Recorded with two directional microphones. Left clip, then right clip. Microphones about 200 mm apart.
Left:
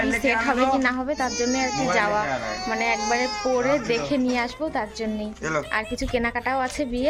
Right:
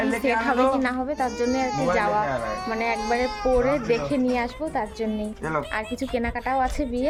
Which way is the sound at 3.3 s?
55° right (ahead or behind).